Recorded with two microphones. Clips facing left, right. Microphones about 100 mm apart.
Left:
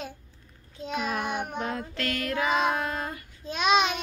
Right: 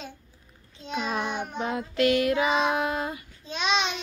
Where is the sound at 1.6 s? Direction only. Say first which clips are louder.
Right 6 dB; 10° right (ahead or behind).